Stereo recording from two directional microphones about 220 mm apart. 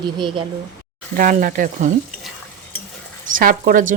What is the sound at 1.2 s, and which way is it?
Speech, 40° right (ahead or behind).